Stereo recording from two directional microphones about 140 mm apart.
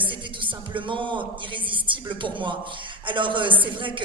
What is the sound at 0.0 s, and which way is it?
A man's voice, 35° right (ahead or behind).